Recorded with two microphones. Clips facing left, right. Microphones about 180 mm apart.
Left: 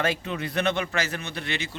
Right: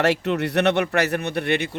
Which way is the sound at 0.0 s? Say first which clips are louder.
Right 7 dB; 70° right (ahead or behind).